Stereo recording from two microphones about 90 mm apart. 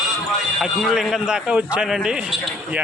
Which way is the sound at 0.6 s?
5° right (ahead or behind).